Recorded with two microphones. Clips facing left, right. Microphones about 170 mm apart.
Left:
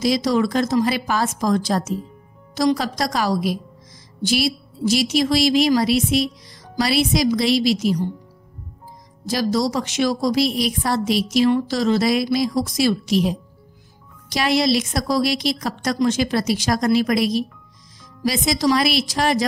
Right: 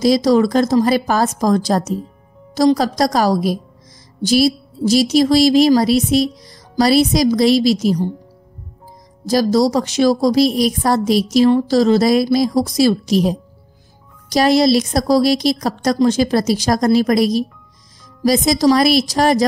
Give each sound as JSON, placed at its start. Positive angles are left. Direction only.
{"t": 0.0, "sound": "a woman's voice", "side_deg": -40}
{"t": 9.2, "sound": "a woman's voice", "side_deg": -40}